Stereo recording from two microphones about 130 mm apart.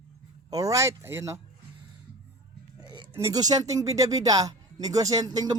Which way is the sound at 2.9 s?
40° right (ahead or behind).